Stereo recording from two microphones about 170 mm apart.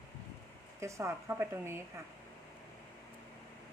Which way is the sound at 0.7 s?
15° right (ahead or behind).